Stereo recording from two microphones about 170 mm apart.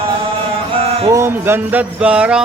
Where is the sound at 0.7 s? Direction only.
35° right (ahead or behind).